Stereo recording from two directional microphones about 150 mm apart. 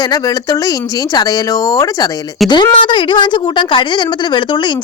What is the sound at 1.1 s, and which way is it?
Speech, 25° left (ahead or behind).